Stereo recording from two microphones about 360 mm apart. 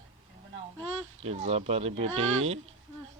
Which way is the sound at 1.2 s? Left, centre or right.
Centre.